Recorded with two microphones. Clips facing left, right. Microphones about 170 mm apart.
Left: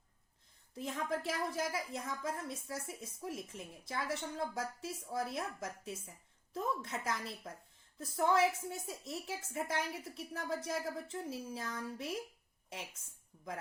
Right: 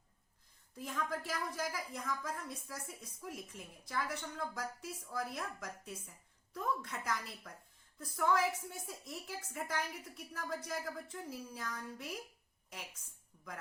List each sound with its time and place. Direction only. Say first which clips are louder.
0.8 s a woman's voice: left 2 dB; 25° left (ahead or behind)